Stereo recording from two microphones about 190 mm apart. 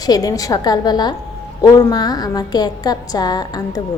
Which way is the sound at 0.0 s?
20° left (ahead or behind).